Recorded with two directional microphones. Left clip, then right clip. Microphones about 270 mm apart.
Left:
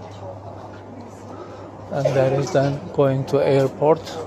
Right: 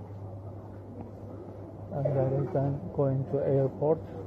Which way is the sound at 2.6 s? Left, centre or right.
Left.